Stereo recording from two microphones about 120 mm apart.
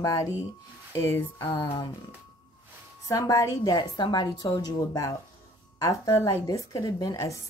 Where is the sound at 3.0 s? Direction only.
25° left (ahead or behind).